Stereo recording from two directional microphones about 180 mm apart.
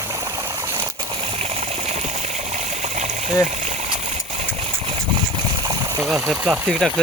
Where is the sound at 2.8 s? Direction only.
40° right (ahead or behind).